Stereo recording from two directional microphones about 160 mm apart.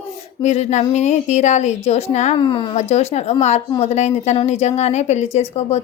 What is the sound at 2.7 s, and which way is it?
A woman's voice, 45° left (ahead or behind).